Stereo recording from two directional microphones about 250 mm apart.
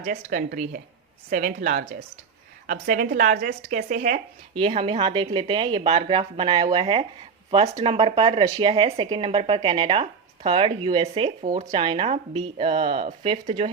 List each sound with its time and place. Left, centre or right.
0.2 s speech: right